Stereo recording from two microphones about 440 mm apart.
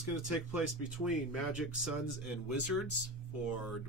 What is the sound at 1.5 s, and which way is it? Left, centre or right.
Speech, centre.